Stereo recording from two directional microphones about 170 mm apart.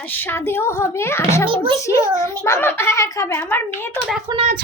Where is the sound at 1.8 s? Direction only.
20° left (ahead or behind).